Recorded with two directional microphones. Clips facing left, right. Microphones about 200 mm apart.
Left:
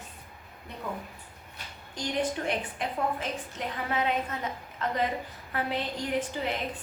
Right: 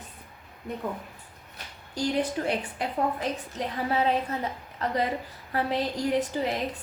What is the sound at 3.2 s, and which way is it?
A woman's voice, 35° right (ahead or behind).